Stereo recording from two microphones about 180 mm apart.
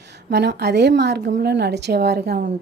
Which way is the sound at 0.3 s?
65° right (ahead or behind).